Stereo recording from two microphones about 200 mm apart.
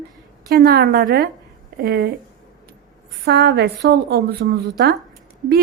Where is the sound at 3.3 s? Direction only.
55° right (ahead or behind).